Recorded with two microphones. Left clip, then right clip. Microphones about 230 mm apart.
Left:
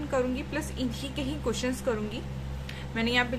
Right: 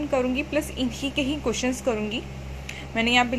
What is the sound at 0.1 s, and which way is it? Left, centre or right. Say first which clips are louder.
A woman's voice: right 5 dB; centre.